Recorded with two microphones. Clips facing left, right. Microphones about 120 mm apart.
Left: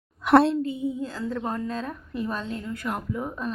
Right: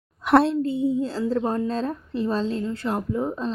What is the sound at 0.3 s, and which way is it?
Speech, centre (ahead or behind).